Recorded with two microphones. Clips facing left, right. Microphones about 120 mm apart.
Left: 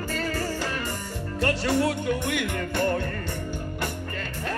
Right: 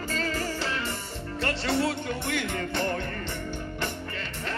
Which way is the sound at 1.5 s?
10° left (ahead or behind).